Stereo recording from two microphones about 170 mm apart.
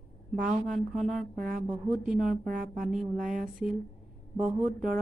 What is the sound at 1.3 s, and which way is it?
Music, 55° right (ahead or behind).